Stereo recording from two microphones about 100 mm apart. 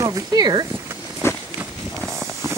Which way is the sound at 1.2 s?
25° left (ahead or behind).